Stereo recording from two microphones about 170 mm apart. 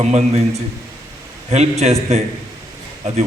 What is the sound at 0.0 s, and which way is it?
Speech, 40° right (ahead or behind).